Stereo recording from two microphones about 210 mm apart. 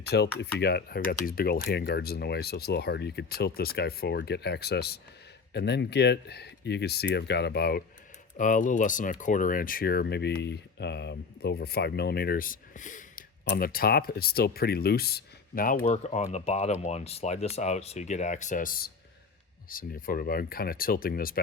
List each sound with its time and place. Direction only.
0.0 s speech: 50° left (ahead or behind)